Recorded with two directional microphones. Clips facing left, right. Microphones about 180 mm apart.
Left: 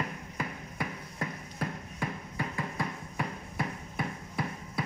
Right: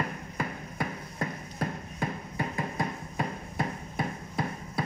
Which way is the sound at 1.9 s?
30° right (ahead or behind).